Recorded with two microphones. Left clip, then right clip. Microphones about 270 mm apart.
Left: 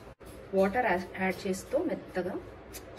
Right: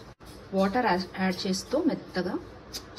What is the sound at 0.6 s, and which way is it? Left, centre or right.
A woman's voice, right.